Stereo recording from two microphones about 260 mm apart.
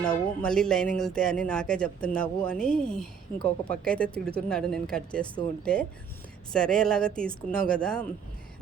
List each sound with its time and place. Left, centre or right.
0.0 s speech: centre
5.2 s speech: centre
5.7 s speech: centre